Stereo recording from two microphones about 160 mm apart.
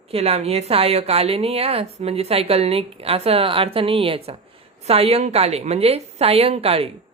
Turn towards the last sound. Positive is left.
turn(degrees=-40)  # may be behind; listen again after turning